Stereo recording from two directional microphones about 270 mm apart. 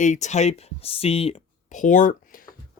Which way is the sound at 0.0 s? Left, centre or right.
Left.